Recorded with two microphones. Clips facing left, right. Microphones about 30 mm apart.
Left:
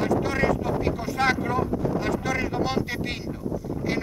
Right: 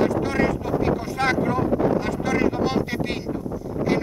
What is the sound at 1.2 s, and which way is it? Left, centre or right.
Wind noise, centre.